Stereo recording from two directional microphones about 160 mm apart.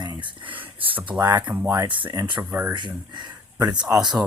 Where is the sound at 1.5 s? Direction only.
15° right (ahead or behind).